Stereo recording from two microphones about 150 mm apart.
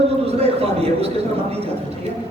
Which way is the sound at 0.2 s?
40° right (ahead or behind).